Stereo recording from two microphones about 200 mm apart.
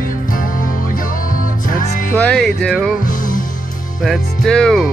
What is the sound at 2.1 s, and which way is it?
Music, 5° left (ahead or behind).